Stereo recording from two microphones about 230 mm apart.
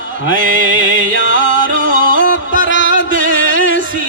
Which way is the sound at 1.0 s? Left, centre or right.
Left.